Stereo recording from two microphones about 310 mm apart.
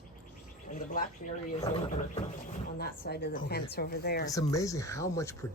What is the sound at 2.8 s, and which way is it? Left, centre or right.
A woman's voice, left.